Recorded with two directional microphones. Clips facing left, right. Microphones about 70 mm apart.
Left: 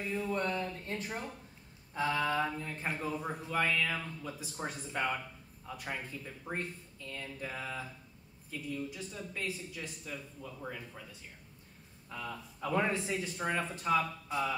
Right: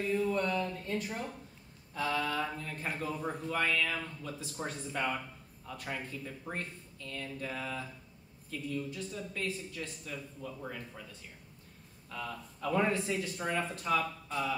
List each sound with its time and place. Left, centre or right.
0.3 s speech: left